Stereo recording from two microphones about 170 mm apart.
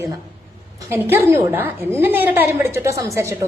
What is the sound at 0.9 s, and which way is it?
A woman's voice, 10° right (ahead or behind).